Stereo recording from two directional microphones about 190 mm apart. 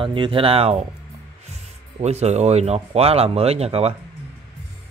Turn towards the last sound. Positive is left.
turn(degrees=-35)  # may be behind; listen again after turning